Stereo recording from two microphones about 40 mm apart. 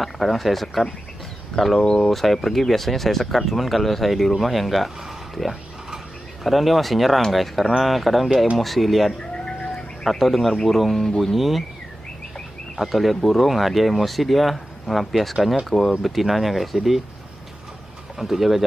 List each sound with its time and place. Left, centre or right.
0.0 s speech: centre
9.2 s bird: centre
10.0 s speech: centre
12.7 s speech: centre
18.1 s speech: centre